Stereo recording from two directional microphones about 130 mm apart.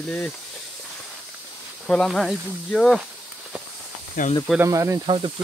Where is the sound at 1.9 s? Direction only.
5° left (ahead or behind).